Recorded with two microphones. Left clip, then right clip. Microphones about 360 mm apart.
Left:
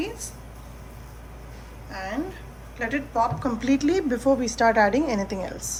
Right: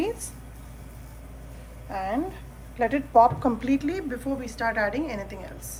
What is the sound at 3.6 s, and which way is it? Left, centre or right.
A woman's voice, centre.